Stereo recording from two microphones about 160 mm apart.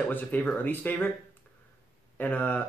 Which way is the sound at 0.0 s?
10° left (ahead or behind).